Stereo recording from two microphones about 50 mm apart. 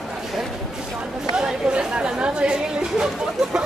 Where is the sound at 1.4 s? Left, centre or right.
Centre.